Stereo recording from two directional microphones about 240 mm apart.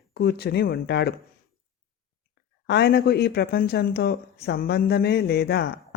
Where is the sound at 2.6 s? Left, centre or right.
Left.